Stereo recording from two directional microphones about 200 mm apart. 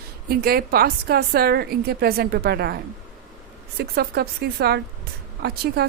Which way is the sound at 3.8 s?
50° right (ahead or behind).